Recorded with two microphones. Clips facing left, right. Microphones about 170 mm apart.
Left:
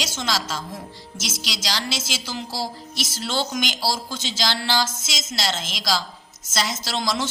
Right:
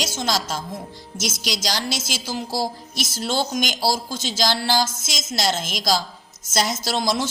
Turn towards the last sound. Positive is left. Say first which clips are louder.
# right 3 dB
turn(degrees=-40)  # may be behind; listen again after turning